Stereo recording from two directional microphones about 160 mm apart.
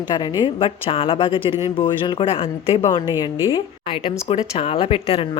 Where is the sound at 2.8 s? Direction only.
25° left (ahead or behind).